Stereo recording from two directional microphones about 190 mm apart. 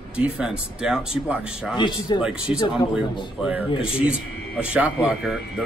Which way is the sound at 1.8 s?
25° left (ahead or behind).